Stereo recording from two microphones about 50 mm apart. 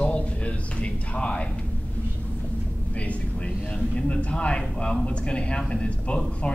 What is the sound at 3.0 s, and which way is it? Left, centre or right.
Speech, left.